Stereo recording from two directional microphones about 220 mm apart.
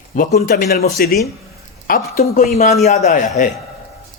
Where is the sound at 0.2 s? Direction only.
40° left (ahead or behind).